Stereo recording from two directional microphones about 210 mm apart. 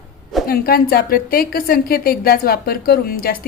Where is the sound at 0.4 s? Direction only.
45° left (ahead or behind).